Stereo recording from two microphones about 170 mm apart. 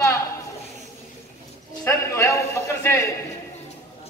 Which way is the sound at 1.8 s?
15° left (ahead or behind).